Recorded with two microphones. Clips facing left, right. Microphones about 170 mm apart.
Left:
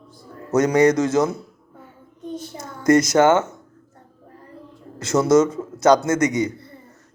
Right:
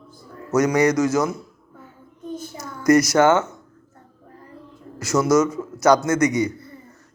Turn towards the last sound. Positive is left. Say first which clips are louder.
# right 1 dB
turn(degrees=25)  # may be behind; listen again after turning